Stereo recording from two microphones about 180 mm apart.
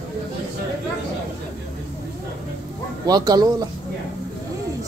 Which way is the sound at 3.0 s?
20° right (ahead or behind).